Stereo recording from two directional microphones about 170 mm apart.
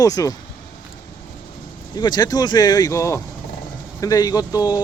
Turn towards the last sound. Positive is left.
turn(degrees=20)  # may be behind; listen again after turning